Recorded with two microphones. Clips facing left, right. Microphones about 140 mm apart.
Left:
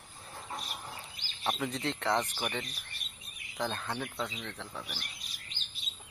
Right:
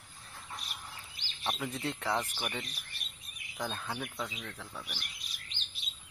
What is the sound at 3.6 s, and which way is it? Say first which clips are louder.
Speech: left 3 dB; 5° right (ahead or behind).